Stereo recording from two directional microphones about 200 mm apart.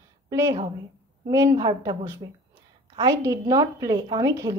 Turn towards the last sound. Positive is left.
turn(degrees=-15)  # may be behind; listen again after turning